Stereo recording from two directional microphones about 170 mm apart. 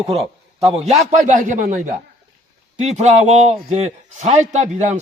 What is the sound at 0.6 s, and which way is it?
A man's voice, 35° right (ahead or behind).